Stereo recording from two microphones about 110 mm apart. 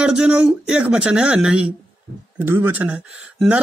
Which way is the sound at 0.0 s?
10° right (ahead or behind).